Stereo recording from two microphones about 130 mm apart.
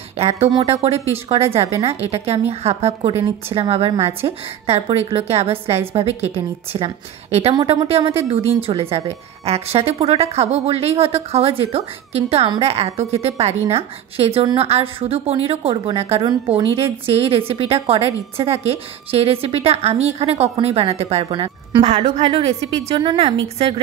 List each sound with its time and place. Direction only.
0.2 s a woman's voice: 50° right (ahead or behind)
22.9 s a woman's voice: 45° right (ahead or behind)